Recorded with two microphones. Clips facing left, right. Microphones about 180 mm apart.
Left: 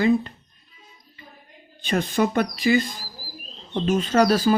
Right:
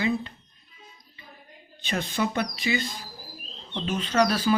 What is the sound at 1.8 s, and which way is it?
Speech, 50° left (ahead or behind).